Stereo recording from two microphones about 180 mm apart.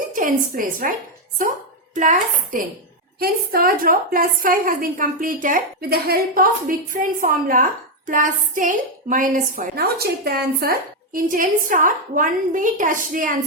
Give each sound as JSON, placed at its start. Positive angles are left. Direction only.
{"t": 0.1, "sound": "a woman's voice", "side_deg": -45}